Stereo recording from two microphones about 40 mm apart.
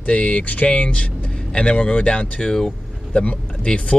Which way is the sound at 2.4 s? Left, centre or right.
Centre.